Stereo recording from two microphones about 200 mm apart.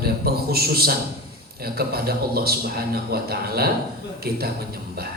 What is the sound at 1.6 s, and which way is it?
A man's voice, 50° right (ahead or behind).